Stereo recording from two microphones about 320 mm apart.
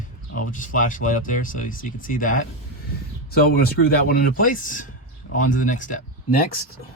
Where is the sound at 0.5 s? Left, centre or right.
Left.